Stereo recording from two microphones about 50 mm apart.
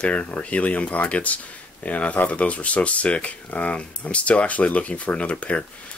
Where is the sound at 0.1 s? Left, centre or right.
Left.